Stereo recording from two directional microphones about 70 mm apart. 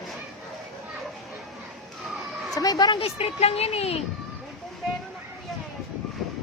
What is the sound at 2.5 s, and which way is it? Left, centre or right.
Speech, left.